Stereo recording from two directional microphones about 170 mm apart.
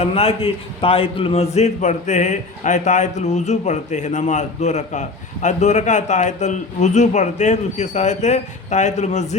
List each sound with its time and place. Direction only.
0.0 s a man's voice: 35° left (ahead or behind)